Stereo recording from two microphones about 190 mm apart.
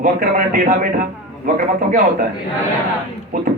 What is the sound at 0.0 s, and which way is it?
Speech, 45° right (ahead or behind).